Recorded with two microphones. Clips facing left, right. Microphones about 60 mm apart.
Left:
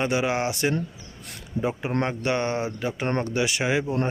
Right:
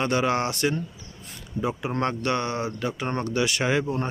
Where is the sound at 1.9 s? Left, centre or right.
Left.